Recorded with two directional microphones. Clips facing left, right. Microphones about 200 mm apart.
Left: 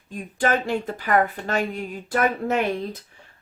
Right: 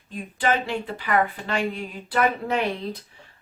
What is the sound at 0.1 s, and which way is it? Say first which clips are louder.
Speech: left 1 dB; 45° left (ahead or behind).